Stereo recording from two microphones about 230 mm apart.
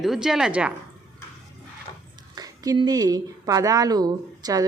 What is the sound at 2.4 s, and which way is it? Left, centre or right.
A woman's voice, centre.